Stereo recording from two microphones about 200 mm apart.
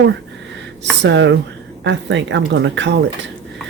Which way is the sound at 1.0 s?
65° right (ahead or behind).